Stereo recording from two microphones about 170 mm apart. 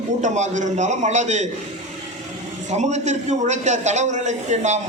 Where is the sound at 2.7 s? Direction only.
45° right (ahead or behind).